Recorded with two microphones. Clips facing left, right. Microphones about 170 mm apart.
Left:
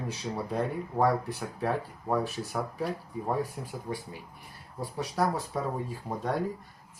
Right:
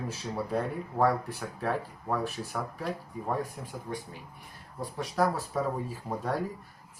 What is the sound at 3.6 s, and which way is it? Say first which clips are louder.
Speech: left 1 dB; 5° left (ahead or behind).